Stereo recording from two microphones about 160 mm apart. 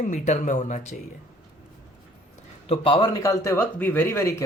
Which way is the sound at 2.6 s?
30° left (ahead or behind).